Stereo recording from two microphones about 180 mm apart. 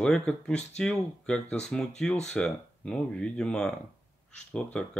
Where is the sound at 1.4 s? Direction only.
35° left (ahead or behind).